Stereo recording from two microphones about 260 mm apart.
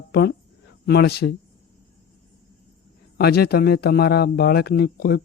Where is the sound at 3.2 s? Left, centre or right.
Left.